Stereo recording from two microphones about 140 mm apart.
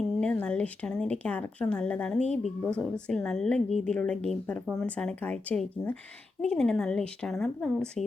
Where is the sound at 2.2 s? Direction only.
55° left (ahead or behind).